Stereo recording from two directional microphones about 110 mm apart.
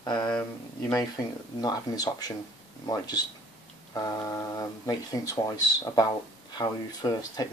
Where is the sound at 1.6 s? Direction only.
40° left (ahead or behind).